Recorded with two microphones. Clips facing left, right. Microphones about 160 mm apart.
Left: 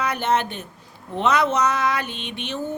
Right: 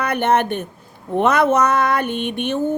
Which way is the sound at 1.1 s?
55° right (ahead or behind).